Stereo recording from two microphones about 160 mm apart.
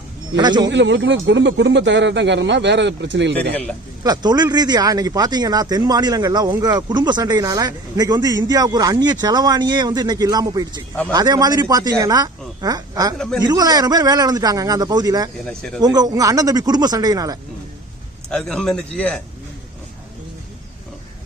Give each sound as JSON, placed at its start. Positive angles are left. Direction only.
{"t": 0.3, "sound": "speech", "side_deg": -25}
{"t": 0.7, "sound": "speech", "side_deg": -90}
{"t": 3.5, "sound": "a man's voice", "side_deg": 5}
{"t": 4.0, "sound": "speech", "side_deg": -25}
{"t": 13.1, "sound": "a man's voice", "side_deg": 5}
{"t": 13.4, "sound": "speech", "side_deg": -25}
{"t": 15.4, "sound": "a man's voice", "side_deg": 5}
{"t": 15.8, "sound": "speech", "side_deg": -25}
{"t": 18.3, "sound": "a man's voice", "side_deg": 5}